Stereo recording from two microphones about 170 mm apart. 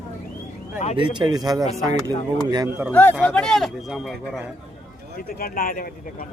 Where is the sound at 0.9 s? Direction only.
30° right (ahead or behind).